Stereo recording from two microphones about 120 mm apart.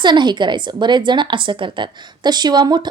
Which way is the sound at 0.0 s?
40° right (ahead or behind).